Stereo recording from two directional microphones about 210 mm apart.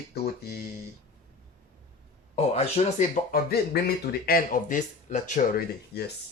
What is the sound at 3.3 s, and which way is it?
Speech, 50° left (ahead or behind).